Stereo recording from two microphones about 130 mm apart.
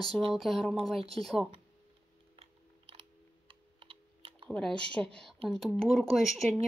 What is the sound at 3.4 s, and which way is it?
Typing, 45° right (ahead or behind).